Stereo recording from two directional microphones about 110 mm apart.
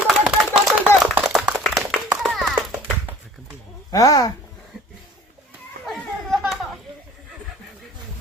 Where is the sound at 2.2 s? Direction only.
Centre (ahead or behind).